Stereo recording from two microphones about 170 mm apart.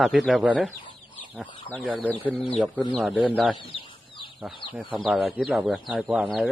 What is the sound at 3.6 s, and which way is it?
Chicken, 30° left (ahead or behind).